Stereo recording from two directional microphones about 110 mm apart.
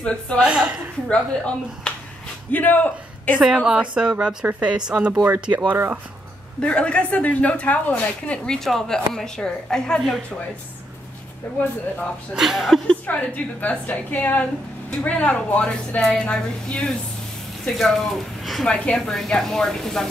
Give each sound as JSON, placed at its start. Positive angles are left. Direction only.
{"t": 0.0, "sound": "a woman's voice", "side_deg": 10}
{"t": 0.4, "sound": "speech", "side_deg": -10}
{"t": 1.0, "sound": "a woman's voice", "side_deg": 10}
{"t": 3.3, "sound": "speech", "side_deg": -5}
{"t": 6.6, "sound": "a woman's voice", "side_deg": 10}
{"t": 11.5, "sound": "a woman's voice", "side_deg": 15}
{"t": 12.4, "sound": "speech", "side_deg": 0}
{"t": 13.0, "sound": "a woman's voice", "side_deg": 15}